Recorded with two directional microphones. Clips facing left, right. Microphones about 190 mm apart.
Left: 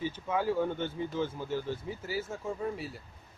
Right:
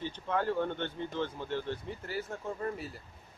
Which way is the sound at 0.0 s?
5° left (ahead or behind).